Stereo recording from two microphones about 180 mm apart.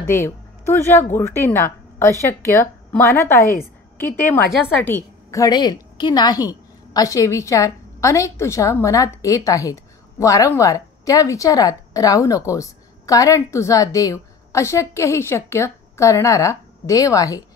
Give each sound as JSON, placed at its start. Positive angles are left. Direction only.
{"t": 0.0, "sound": "a woman's voice", "side_deg": 15}